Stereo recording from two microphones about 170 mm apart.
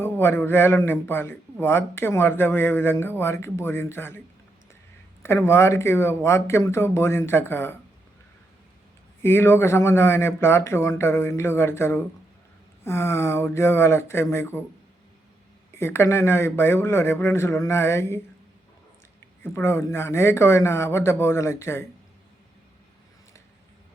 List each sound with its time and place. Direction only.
0.0 s a man's voice: 15° left (ahead or behind)
5.2 s a man's voice: 15° left (ahead or behind)
9.2 s a man's voice: 15° left (ahead or behind)
15.7 s a man's voice: 15° left (ahead or behind)
19.4 s a man's voice: 15° left (ahead or behind)